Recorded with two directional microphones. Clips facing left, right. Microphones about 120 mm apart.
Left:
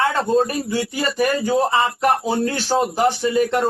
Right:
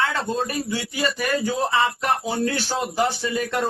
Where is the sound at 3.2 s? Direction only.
25° left (ahead or behind).